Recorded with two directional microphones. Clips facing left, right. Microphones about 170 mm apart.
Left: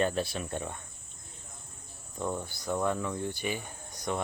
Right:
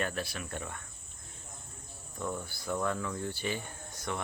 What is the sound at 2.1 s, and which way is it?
Speech, 20° left (ahead or behind).